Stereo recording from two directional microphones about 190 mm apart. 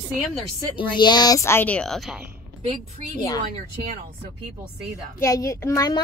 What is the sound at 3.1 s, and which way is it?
Child singing, 20° left (ahead or behind).